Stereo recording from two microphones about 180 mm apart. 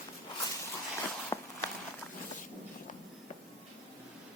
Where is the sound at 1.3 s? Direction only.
20° left (ahead or behind).